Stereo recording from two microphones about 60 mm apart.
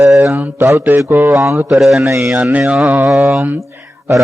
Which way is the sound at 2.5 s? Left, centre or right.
Right.